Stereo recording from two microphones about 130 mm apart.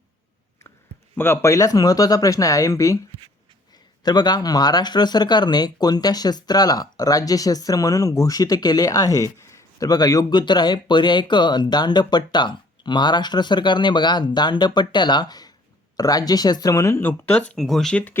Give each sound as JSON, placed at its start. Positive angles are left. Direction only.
{"t": 1.1, "sound": "speech", "side_deg": 15}
{"t": 4.0, "sound": "speech", "side_deg": 30}